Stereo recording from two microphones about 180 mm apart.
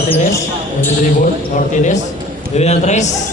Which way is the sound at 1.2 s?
45° left (ahead or behind).